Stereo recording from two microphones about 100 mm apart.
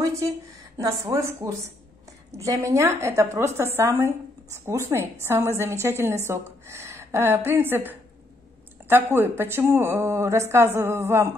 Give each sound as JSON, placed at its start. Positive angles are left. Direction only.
{"t": 0.0, "sound": "a woman's voice", "side_deg": -35}